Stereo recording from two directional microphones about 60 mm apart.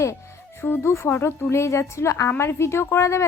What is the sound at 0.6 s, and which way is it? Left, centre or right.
A woman's voice, left.